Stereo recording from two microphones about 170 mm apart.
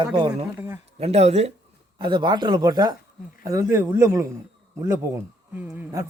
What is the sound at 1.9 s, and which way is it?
A man's voice, 25° right (ahead or behind).